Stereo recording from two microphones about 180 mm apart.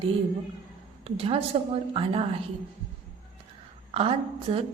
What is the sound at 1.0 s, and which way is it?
A woman's voice, 30° right (ahead or behind).